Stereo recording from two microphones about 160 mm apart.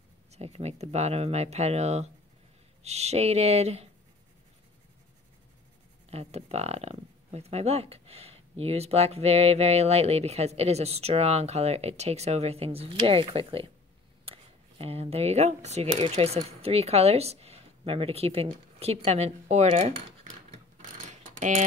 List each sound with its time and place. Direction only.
0.3 s speech: 40° right (ahead or behind)
6.0 s speech: 40° right (ahead or behind)
20.7 s mechanisms: 50° right (ahead or behind)